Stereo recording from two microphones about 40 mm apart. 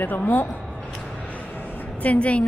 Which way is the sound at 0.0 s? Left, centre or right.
Left.